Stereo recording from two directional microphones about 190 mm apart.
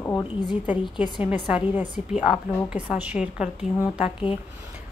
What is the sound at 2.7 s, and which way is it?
A woman's voice, 10° right (ahead or behind).